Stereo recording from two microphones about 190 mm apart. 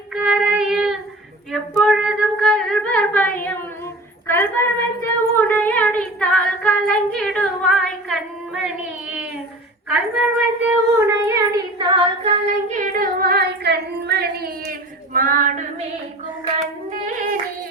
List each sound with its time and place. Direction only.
0.1 s child singing: 5° right (ahead or behind)
1.5 s female singing: centre (ahead or behind)
4.3 s a sound: 10° left (ahead or behind)
9.9 s a woman's voice: 5° right (ahead or behind)
10.9 s child singing: 15° right (ahead or behind); by 15.6 s 45° right (ahead or behind)